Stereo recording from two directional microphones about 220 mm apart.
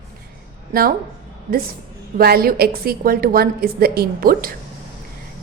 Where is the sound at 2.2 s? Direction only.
45° right (ahead or behind).